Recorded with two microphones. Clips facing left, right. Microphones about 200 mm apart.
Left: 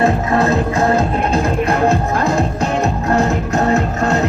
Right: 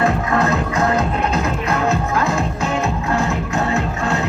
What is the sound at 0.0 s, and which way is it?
Music, 25° left (ahead or behind).